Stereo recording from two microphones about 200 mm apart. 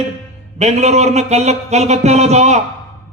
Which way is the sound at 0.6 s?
35° right (ahead or behind).